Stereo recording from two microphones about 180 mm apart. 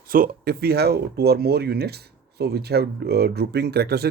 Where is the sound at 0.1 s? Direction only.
55° right (ahead or behind).